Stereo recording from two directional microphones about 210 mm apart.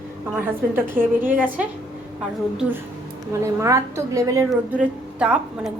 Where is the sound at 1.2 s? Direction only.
10° right (ahead or behind).